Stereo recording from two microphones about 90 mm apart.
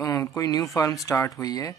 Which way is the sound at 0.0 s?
35° left (ahead or behind).